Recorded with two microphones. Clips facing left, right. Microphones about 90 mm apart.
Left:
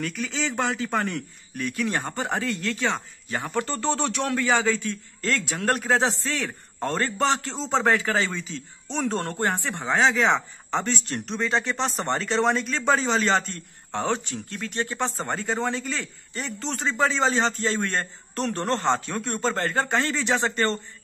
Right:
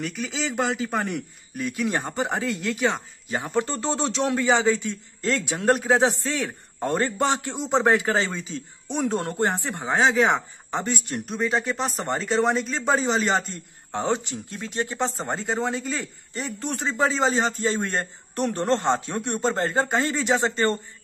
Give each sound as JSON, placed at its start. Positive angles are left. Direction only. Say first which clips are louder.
{"t": 0.0, "sound": "a man's voice", "louder": "even", "side_deg": -20}